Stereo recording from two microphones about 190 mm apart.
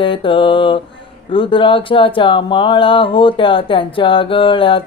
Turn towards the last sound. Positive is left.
turn(degrees=30)  # may be behind; listen again after turning